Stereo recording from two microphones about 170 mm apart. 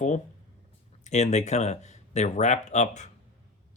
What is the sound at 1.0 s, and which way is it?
Speech, 40° left (ahead or behind).